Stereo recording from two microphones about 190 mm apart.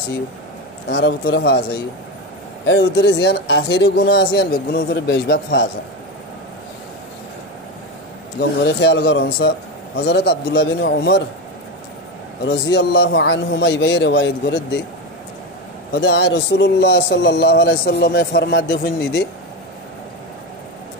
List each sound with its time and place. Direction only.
0.8 s a man's voice: 60° left (ahead or behind)
2.6 s a man's voice: 70° left (ahead or behind)
8.4 s a man's voice: 65° left (ahead or behind)
12.4 s a man's voice: 65° left (ahead or behind)
15.9 s a man's voice: 65° left (ahead or behind)